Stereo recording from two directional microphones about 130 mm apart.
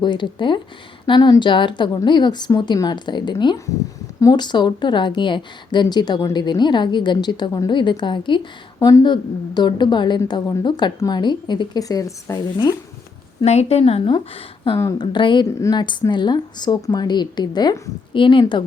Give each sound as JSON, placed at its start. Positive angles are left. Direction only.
{"t": 0.0, "sound": "a woman's voice", "side_deg": 35}
{"t": 13.4, "sound": "a woman's voice", "side_deg": 55}
{"t": 14.8, "sound": "speech", "side_deg": 30}
{"t": 15.0, "sound": "a woman's voice", "side_deg": 40}